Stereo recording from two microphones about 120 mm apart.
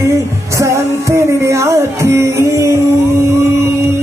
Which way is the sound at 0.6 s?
25° right (ahead or behind).